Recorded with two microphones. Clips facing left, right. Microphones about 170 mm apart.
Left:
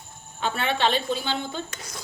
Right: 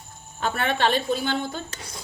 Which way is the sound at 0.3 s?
45° right (ahead or behind).